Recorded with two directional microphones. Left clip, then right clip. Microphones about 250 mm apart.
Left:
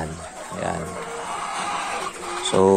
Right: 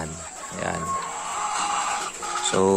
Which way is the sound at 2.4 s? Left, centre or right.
Centre.